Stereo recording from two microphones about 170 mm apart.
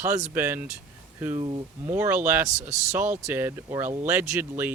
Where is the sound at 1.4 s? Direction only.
30° right (ahead or behind).